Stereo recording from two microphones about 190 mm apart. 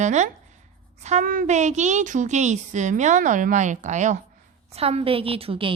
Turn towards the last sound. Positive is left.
turn(degrees=-30)  # may be behind; listen again after turning